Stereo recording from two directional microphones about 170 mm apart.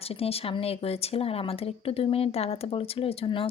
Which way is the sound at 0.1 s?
35° left (ahead or behind).